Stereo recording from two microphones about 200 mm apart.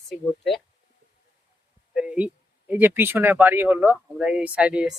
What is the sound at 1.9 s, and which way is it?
Speech, 5° right (ahead or behind).